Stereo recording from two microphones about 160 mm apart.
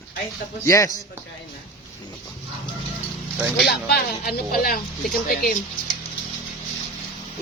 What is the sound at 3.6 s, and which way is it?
Speech, 90° left.